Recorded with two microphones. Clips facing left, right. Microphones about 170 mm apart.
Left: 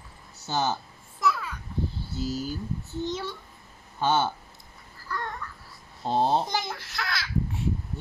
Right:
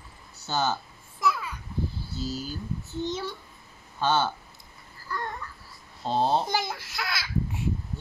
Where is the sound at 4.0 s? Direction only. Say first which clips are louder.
Left 1 dB; 20° left (ahead or behind).